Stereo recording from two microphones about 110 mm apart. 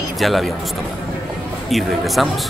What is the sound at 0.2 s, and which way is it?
Speech, centre (ahead or behind).